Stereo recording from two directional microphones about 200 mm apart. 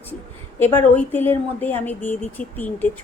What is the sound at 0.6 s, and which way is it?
Speech, 10° left (ahead or behind).